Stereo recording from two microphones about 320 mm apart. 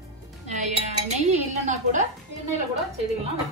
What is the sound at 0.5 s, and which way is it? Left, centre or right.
Dishes, right.